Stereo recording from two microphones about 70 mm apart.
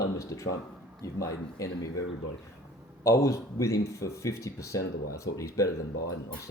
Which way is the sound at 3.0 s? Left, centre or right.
Left.